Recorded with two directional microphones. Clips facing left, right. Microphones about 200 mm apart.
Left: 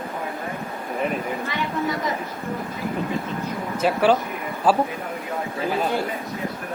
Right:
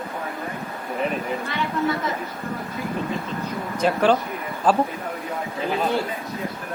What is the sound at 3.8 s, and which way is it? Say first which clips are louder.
Speech: even; 5° left (ahead or behind).